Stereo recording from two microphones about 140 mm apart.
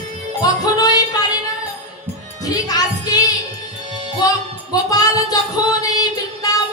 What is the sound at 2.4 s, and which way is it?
Music, 25° left (ahead or behind).